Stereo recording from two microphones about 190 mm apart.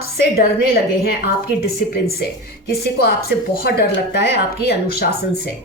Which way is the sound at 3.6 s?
60° left (ahead or behind).